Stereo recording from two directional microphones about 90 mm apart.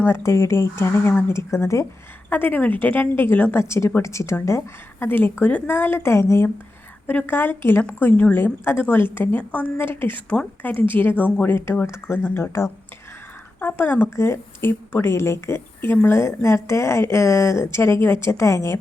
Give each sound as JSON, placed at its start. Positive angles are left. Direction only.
{"t": 0.0, "sound": "a woman's voice", "side_deg": 30}
{"t": 2.3, "sound": "a woman's voice", "side_deg": 20}